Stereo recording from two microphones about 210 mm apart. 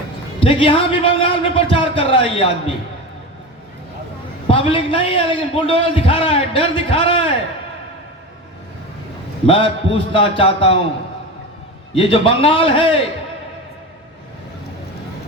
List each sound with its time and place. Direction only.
0.3 s a man's voice: 25° left (ahead or behind)
4.4 s a man's voice: 25° left (ahead or behind)
9.5 s a man's voice: 25° left (ahead or behind)
11.9 s a man's voice: 25° left (ahead or behind)